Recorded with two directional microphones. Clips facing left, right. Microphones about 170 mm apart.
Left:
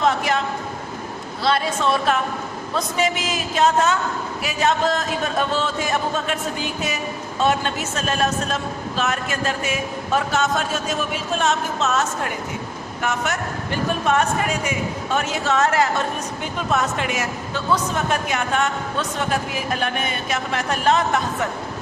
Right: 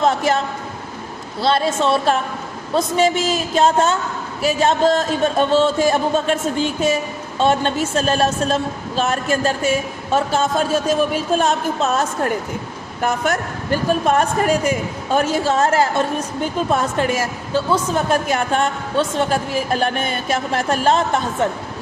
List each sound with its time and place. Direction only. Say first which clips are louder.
0.0 s a woman's voice: right 3 dB; 30° right (ahead or behind)
1.4 s a woman's voice: right 4 dB; 30° right (ahead or behind)